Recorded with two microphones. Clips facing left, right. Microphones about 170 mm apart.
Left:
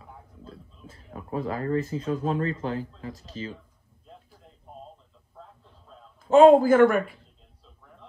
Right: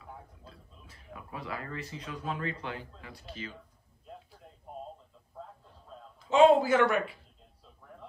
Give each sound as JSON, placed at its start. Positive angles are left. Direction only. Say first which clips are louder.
{"t": 0.8, "sound": "speech", "louder": "left 8 dB", "side_deg": 40}
{"t": 6.2, "sound": "speech", "louder": "left 7 dB", "side_deg": 50}